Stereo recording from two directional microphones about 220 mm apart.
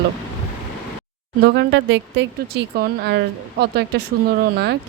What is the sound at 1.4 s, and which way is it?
Speech, 50° right (ahead or behind).